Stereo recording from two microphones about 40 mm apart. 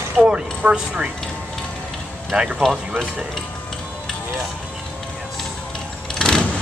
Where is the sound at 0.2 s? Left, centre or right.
Right.